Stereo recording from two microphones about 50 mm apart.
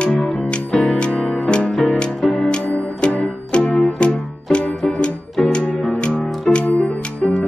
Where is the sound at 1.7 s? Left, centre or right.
Centre.